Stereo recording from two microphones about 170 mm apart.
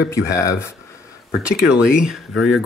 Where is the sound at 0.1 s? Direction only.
15° left (ahead or behind).